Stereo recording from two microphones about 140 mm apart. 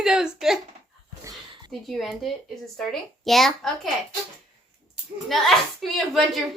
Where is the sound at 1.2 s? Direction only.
25° right (ahead or behind).